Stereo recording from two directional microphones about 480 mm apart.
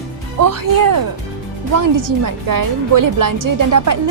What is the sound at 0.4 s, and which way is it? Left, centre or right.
A woman's voice, right.